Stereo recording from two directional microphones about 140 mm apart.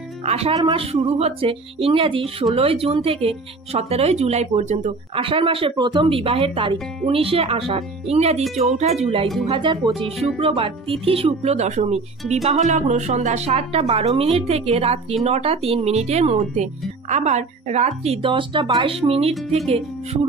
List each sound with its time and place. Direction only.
0.2 s speech: 50° right (ahead or behind)
5.2 s speech: 40° right (ahead or behind)